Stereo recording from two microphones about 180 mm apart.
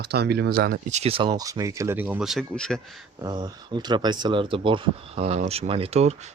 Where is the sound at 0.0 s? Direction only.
65° right (ahead or behind).